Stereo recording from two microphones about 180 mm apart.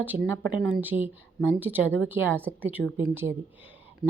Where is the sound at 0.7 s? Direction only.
10° right (ahead or behind).